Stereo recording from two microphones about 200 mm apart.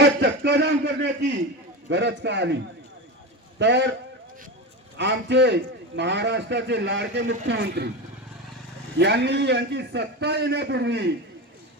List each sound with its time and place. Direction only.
0.0 s a man's voice: 60° right (ahead or behind)
3.6 s a man's voice: 60° right (ahead or behind)
4.9 s a man's voice: 60° right (ahead or behind)
9.0 s a man's voice: 60° right (ahead or behind)